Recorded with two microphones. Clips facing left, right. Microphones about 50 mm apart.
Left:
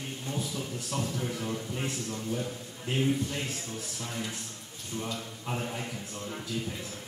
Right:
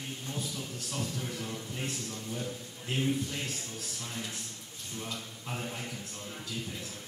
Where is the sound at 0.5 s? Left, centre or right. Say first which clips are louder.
Left 4 dB; centre.